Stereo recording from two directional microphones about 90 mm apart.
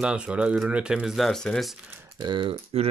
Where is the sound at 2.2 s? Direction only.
60° right (ahead or behind).